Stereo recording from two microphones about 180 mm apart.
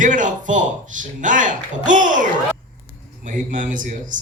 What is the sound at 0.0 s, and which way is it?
A man's voice, 45° right (ahead or behind).